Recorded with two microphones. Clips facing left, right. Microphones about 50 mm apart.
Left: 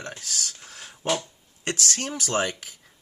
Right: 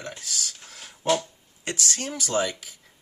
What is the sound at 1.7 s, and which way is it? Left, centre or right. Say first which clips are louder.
Speech: left 2 dB; left.